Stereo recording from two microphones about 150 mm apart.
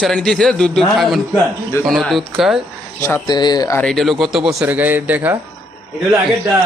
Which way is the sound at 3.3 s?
25° left (ahead or behind).